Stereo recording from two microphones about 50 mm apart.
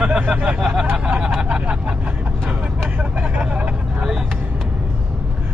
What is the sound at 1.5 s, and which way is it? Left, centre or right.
Vehicle, right.